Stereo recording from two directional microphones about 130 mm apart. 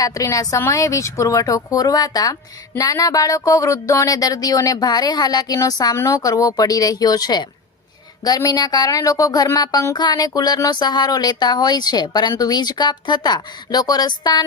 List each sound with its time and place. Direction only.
0.0 s a woman's voice: 25° left (ahead or behind)